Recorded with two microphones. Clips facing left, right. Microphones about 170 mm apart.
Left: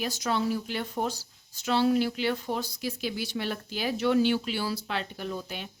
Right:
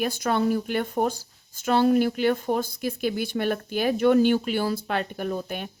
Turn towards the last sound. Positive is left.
turn(degrees=-50)  # may be behind; listen again after turning